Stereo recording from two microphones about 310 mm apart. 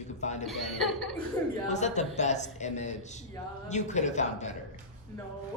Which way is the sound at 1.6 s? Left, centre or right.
Left.